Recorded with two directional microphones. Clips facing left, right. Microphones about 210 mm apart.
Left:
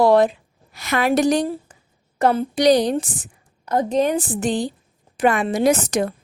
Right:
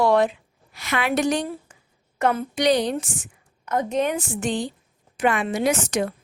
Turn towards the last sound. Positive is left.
turn(degrees=35)  # may be behind; listen again after turning